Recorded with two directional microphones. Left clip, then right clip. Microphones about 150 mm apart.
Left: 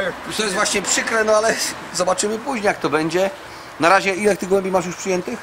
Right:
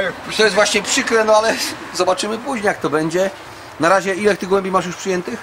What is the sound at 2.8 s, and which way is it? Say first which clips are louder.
Speech: right 1 dB; 40° right (ahead or behind).